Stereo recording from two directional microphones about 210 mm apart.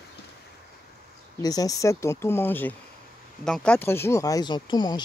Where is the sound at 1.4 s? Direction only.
15° left (ahead or behind).